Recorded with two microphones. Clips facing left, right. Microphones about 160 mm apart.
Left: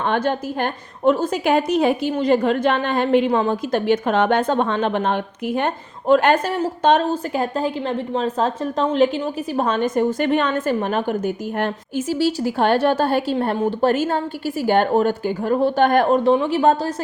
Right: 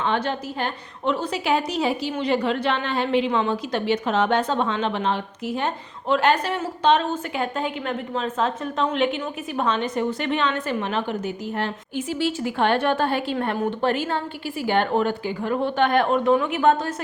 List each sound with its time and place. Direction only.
0.0 s a woman's voice: 50° left (ahead or behind); by 16.9 s 35° left (ahead or behind)